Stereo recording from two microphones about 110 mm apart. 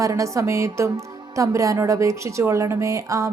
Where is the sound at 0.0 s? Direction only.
30° right (ahead or behind).